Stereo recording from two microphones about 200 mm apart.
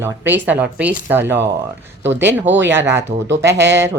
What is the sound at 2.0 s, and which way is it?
Speech, 60° right (ahead or behind).